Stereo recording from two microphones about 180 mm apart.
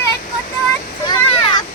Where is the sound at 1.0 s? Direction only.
25° left (ahead or behind).